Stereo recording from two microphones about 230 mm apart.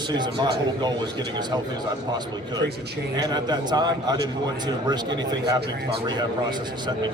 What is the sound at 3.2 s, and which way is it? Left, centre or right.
A man's voice, centre.